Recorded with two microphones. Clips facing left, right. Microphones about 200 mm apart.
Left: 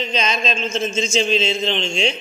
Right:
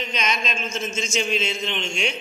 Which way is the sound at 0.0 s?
30° left (ahead or behind).